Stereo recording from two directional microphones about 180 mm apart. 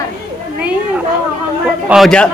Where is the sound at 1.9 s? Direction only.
Centre (ahead or behind).